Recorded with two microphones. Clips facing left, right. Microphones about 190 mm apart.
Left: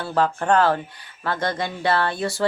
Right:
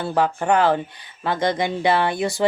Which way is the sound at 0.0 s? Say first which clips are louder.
Right 1 dB; 15° right (ahead or behind).